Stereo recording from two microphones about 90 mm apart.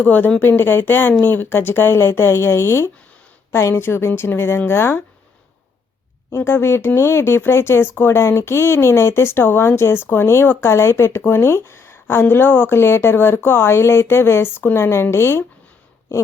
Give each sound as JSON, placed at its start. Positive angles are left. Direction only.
{"t": 0.0, "sound": "speech", "side_deg": 20}
{"t": 6.3, "sound": "speech", "side_deg": 25}